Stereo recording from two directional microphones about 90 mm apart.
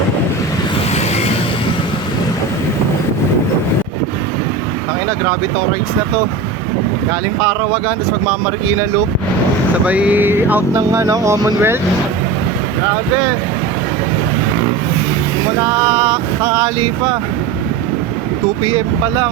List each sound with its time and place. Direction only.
7.4 s speech: 20° right (ahead or behind)
9.8 s speech: 15° right (ahead or behind)
15.6 s male singing: 30° right (ahead or behind)